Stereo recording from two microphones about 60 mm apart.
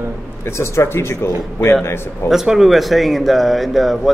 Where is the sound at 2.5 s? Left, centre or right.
Centre.